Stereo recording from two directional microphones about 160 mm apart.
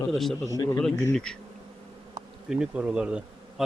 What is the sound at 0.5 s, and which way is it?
Speech, 20° left (ahead or behind).